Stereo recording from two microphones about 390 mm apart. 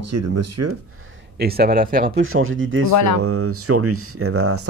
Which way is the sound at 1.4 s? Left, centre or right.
Right.